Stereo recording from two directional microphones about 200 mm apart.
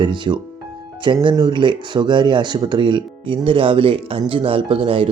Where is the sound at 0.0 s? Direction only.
25° right (ahead or behind).